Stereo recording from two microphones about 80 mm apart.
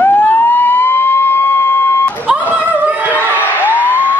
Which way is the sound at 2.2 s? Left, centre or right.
Centre.